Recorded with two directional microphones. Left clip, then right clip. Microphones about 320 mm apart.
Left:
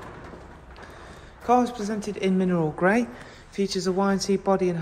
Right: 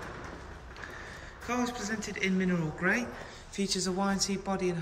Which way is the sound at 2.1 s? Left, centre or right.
Centre.